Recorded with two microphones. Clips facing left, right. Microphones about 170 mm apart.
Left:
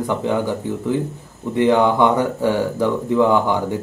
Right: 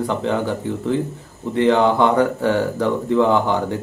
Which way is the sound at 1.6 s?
15° left (ahead or behind).